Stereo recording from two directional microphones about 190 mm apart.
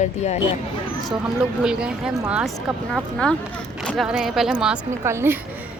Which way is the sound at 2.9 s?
5° left (ahead or behind).